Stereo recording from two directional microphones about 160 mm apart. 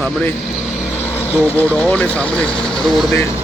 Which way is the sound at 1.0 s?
10° left (ahead or behind).